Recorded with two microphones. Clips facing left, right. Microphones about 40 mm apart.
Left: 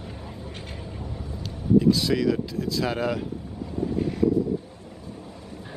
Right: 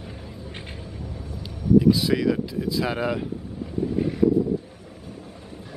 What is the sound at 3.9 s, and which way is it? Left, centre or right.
Vehicle, centre.